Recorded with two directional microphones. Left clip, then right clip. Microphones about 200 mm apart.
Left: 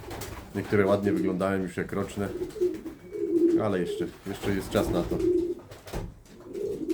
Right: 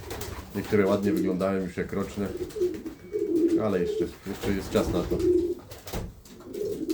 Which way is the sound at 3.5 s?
20° left (ahead or behind).